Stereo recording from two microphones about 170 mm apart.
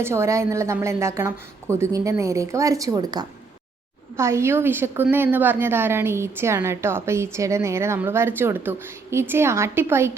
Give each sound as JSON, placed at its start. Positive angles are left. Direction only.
{"t": 0.0, "sound": "a woman's voice", "side_deg": -15}